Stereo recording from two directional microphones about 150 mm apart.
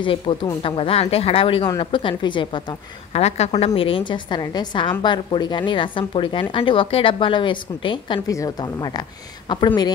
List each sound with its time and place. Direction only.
0.0 s a woman's voice: 35° left (ahead or behind)
3.1 s a woman's voice: 45° left (ahead or behind); by 9.9 s 30° left (ahead or behind)